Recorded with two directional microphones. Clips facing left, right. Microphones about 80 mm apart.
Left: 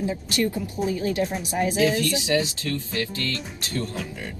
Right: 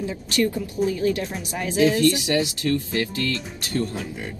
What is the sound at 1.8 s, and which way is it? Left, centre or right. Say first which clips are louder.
Speech: right 5 dB; right.